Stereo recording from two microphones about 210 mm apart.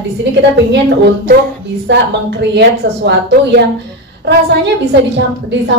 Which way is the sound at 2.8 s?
60° right (ahead or behind).